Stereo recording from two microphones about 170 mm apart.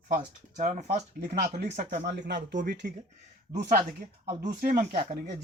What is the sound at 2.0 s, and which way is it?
Speech, 90° right.